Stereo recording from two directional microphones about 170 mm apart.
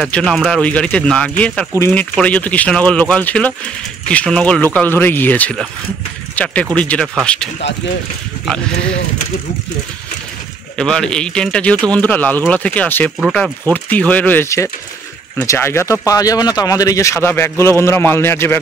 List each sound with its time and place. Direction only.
0.0 s a man's voice: 5° left (ahead or behind)
10.8 s a man's voice: 5° left (ahead or behind)